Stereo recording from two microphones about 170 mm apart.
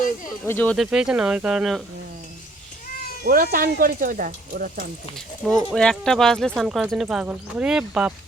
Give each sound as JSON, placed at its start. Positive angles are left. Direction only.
{"t": 0.4, "sound": "speech", "side_deg": 10}
{"t": 0.8, "sound": "speech", "side_deg": -5}
{"t": 3.2, "sound": "speech", "side_deg": -55}
{"t": 5.1, "sound": "speech", "side_deg": 0}